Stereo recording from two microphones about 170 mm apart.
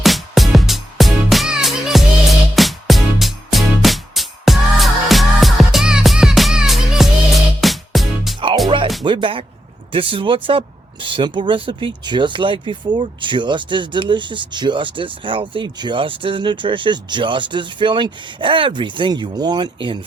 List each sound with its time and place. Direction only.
0.0 s music: centre (ahead or behind)
9.0 s speech: 30° right (ahead or behind)